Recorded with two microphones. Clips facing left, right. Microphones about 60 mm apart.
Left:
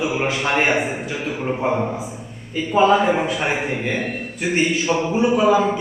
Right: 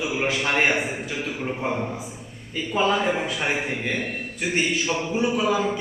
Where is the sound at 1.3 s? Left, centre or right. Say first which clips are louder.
Left 7 dB; left.